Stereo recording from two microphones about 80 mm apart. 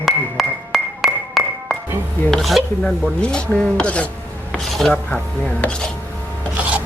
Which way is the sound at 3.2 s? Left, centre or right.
Centre.